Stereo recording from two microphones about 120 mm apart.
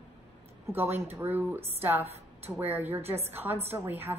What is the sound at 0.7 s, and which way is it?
A woman's voice, 15° right (ahead or behind).